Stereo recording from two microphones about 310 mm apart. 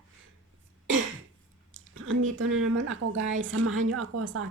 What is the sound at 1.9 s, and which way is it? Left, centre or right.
A woman's voice, right.